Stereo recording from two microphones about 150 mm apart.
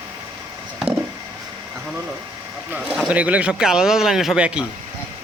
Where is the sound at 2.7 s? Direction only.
10° right (ahead or behind).